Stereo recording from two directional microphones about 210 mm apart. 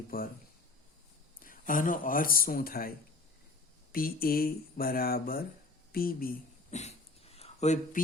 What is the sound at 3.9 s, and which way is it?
Speech, 45° left (ahead or behind).